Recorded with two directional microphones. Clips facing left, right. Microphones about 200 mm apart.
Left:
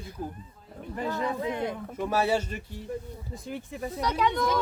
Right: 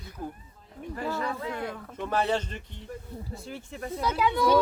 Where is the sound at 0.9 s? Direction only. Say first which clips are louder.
Left 2 dB; 20° left (ahead or behind).